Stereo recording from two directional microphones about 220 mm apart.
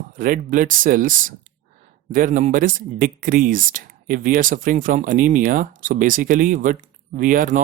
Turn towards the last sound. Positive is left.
turn(degrees=-35)  # may be behind; listen again after turning